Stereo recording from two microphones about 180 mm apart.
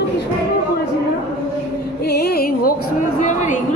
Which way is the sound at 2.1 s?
60° left (ahead or behind).